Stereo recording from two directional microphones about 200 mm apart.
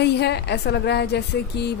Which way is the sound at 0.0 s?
55° left (ahead or behind).